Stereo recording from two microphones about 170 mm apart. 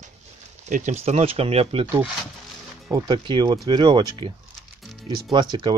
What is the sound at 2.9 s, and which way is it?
Speech, 20° right (ahead or behind).